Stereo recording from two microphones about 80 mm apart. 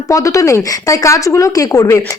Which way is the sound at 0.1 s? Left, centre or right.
Left.